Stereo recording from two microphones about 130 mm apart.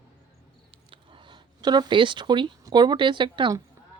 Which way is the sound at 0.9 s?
40° right (ahead or behind).